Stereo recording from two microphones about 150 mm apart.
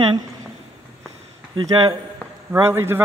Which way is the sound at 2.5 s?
15° right (ahead or behind).